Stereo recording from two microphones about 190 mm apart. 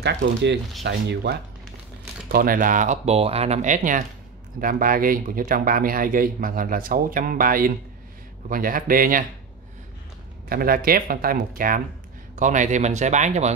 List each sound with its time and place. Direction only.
0.0 s speech: 65° right (ahead or behind)
2.3 s speech: 50° right (ahead or behind)
10.5 s speech: 50° right (ahead or behind)